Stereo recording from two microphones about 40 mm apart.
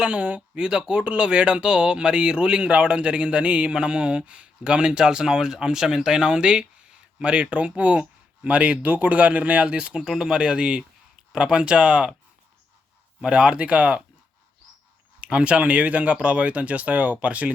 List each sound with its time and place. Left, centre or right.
0.0 s speech: right
10.0 s speech: centre
13.2 s speech: right
15.2 s speech: right